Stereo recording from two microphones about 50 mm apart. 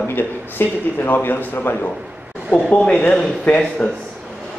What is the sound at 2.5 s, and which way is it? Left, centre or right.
Speech, centre.